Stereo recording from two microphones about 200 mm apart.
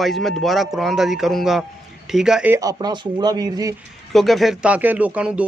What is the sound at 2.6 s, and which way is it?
Speech, 20° right (ahead or behind).